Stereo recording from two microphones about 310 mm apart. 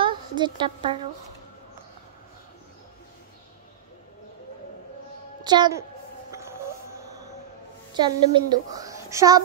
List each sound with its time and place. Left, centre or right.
0.0 s a woman's voice: centre
5.4 s a woman's voice: centre
6.3 s music: centre
7.9 s a woman's voice: centre